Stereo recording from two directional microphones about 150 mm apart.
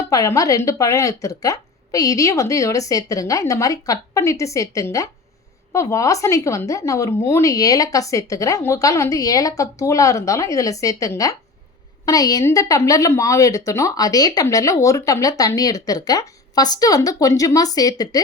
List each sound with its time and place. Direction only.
0.1 s a woman's voice: 20° left (ahead or behind)